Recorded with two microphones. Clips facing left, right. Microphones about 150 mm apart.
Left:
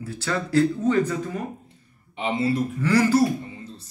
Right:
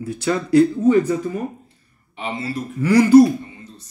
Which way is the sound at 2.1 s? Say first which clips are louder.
Left 3 dB; 25° left (ahead or behind).